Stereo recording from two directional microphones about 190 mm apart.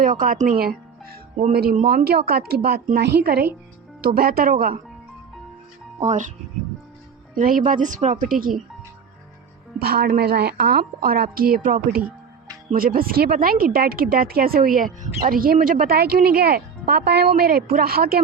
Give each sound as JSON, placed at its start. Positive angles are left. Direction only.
{"t": 0.0, "sound": "a woman's voice", "side_deg": -45}
{"t": 6.0, "sound": "speech", "side_deg": -40}
{"t": 7.3, "sound": "speech", "side_deg": -45}
{"t": 9.7, "sound": "speech", "side_deg": -55}